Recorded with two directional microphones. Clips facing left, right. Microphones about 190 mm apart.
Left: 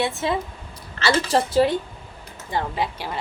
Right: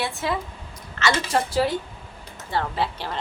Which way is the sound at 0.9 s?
30° left (ahead or behind).